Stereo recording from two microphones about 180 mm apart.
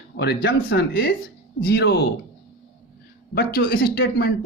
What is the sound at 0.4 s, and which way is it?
Speech, 65° left (ahead or behind).